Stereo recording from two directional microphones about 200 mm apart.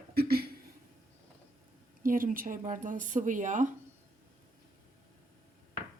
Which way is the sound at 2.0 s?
45° right (ahead or behind).